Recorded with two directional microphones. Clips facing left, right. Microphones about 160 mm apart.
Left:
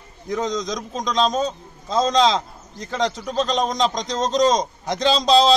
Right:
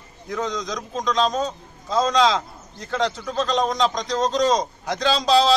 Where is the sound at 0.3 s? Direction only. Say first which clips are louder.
Left 3 dB; 20° left (ahead or behind).